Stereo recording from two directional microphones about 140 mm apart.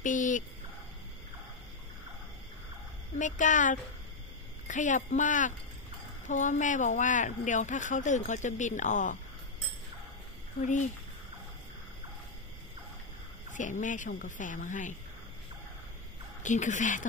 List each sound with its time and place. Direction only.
0.0 s speech: 65° left (ahead or behind)
3.2 s speech: 65° left (ahead or behind)
10.6 s speech: 60° left (ahead or behind)
13.5 s speech: 65° left (ahead or behind)
16.4 s speech: 60° left (ahead or behind)